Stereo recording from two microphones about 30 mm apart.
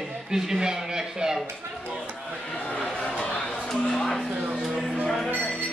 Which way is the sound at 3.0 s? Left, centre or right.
Left.